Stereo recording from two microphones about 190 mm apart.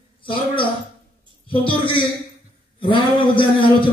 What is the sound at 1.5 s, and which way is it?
A man's voice, 25° left (ahead or behind).